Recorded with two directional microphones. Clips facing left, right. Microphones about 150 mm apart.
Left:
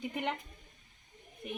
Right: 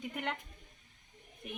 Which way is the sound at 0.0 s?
5° left (ahead or behind).